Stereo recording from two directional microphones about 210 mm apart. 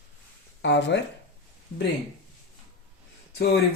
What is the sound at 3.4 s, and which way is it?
Speech, 50° left (ahead or behind).